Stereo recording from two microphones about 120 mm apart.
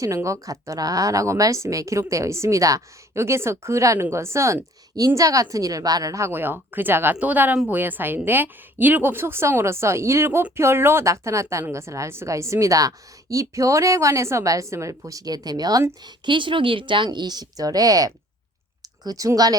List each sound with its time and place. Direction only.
0.0 s a woman's voice: 25° right (ahead or behind)
16.0 s a woman's voice: 40° right (ahead or behind)